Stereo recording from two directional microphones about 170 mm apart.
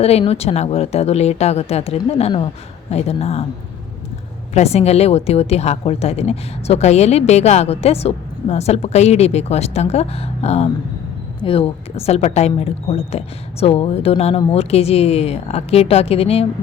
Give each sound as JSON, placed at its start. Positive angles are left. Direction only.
{"t": 0.0, "sound": "a woman's voice", "side_deg": 35}
{"t": 4.5, "sound": "a woman's voice", "side_deg": 40}